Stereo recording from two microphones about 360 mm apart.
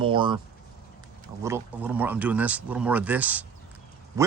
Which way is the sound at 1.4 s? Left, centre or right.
Centre.